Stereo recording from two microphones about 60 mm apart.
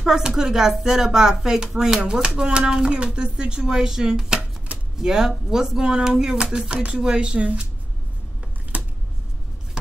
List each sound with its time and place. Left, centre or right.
0.0 s speech: centre